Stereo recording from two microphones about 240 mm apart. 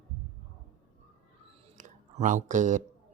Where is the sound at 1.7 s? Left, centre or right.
Right.